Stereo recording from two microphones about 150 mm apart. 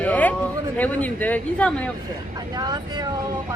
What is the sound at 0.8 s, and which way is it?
A man's voice, 10° left (ahead or behind).